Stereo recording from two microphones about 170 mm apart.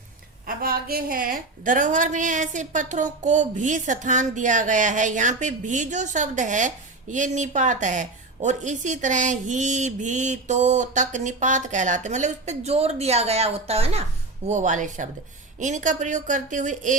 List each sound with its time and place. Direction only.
0.4 s a woman's voice: 60° right (ahead or behind)